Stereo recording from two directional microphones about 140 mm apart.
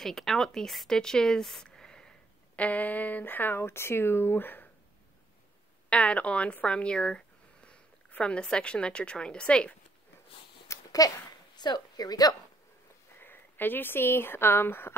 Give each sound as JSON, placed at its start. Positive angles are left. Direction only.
{"t": 0.0, "sound": "a woman's voice", "side_deg": 0}
{"t": 5.9, "sound": "speech", "side_deg": 10}
{"t": 10.7, "sound": "a sound", "side_deg": 25}
{"t": 11.5, "sound": "a woman's voice", "side_deg": 30}
{"t": 13.2, "sound": "speech", "side_deg": 15}